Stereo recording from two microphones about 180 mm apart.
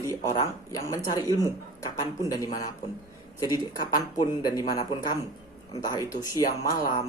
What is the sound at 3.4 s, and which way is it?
Speech, 20° left (ahead or behind).